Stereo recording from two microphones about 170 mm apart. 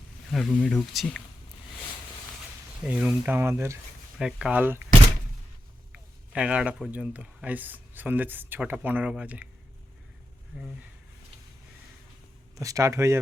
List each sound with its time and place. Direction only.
0.3 s speech: centre (ahead or behind)
2.8 s speech: 5° right (ahead or behind)
4.2 s speech: 5° right (ahead or behind)
5.9 s speech: 5° right (ahead or behind)
12.5 s speech: 20° right (ahead or behind)